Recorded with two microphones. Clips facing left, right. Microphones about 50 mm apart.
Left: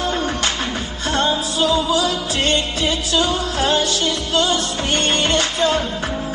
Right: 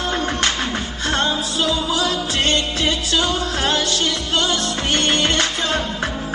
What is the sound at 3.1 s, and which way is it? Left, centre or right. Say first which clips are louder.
Music: left 1 dB; right.